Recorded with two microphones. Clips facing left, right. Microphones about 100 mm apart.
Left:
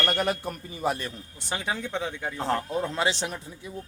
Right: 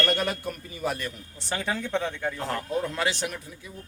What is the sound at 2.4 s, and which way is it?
Speech, 25° left (ahead or behind).